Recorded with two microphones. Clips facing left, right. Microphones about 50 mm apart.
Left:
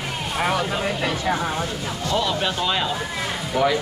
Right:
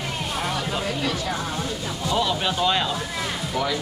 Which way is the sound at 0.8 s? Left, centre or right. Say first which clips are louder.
Left 3 dB; left.